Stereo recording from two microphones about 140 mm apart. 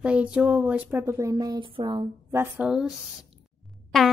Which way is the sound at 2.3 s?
15° right (ahead or behind).